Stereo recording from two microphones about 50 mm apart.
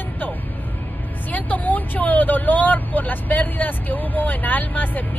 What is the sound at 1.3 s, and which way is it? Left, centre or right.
Speech, left.